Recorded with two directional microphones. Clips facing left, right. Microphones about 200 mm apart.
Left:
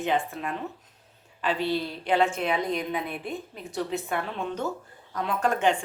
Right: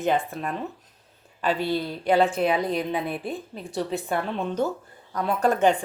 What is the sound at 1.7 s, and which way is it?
Speech, 40° right (ahead or behind).